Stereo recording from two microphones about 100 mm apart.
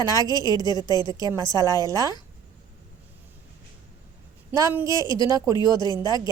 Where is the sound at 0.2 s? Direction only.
40° left (ahead or behind).